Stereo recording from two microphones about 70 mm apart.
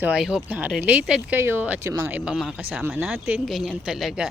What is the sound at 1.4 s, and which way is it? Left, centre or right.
Speech, right.